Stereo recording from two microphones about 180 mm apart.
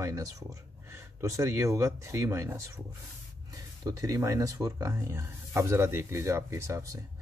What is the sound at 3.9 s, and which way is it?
Speech, 20° right (ahead or behind).